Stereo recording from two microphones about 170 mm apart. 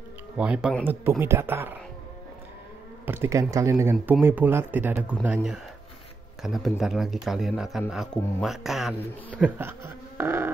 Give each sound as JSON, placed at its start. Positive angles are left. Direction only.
{"t": 0.4, "sound": "speech", "side_deg": -5}
{"t": 3.1, "sound": "speech", "side_deg": -15}
{"t": 9.6, "sound": "a sound", "side_deg": -15}